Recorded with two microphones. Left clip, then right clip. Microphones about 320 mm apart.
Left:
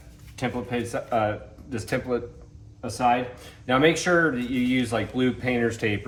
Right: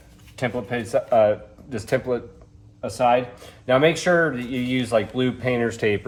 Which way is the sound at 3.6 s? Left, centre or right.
Right.